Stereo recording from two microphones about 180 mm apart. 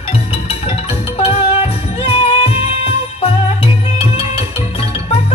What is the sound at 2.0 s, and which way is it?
Jingle bell, 35° left (ahead or behind).